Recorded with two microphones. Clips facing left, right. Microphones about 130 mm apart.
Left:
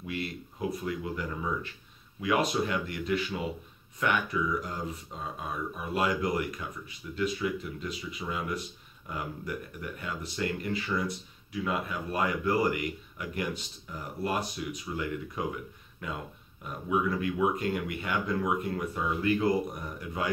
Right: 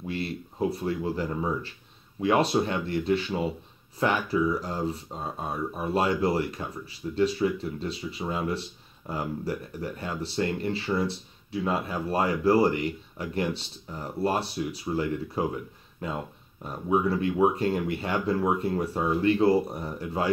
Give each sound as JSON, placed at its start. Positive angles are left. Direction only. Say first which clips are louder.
{"t": 0.0, "sound": "speech", "louder": "right 4 dB", "side_deg": -30}